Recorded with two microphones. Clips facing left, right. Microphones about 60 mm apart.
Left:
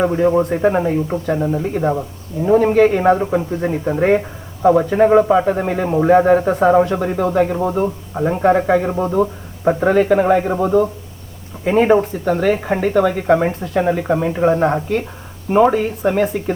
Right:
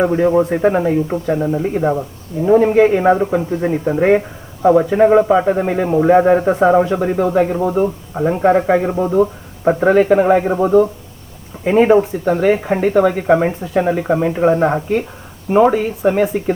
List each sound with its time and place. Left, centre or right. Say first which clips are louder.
0.6 s a man's voice: right 2 dB; centre
12.3 s a man's voice: right 2 dB; centre